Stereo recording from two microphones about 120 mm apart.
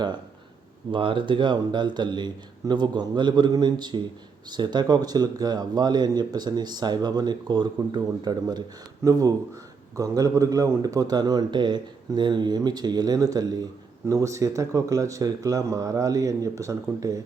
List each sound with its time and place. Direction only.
0.9 s speech: 45° right (ahead or behind); by 17.2 s 25° right (ahead or behind)